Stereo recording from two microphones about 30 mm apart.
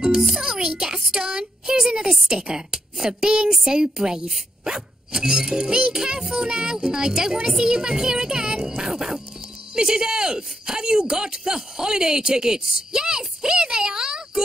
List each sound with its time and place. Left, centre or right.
0.7 s speech: right
8.9 s speech: centre
9.8 s speech: right